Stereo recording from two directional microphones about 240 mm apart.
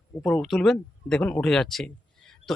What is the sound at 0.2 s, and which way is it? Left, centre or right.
Speech, centre.